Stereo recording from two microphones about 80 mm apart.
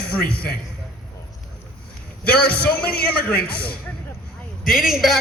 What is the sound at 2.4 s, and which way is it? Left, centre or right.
Speech, centre.